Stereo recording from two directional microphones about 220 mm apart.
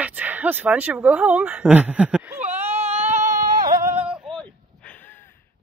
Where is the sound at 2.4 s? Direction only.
30° right (ahead or behind).